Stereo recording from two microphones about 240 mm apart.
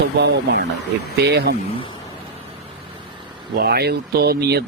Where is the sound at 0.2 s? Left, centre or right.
Right.